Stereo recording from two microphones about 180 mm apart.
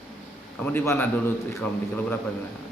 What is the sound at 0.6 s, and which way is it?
Speech, 10° left (ahead or behind).